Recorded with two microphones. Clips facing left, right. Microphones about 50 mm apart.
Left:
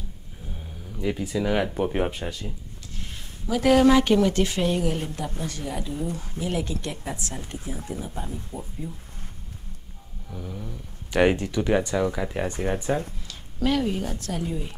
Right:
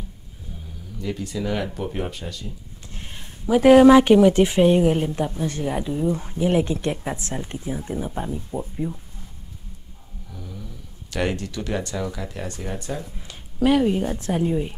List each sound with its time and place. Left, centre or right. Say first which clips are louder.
0.9 s speech: left 2 dB; centre
2.9 s speech: right 1 dB; right
10.3 s speech: left 3 dB; centre; by 13.0 s left
13.3 s a woman's voice: right 6 dB; centre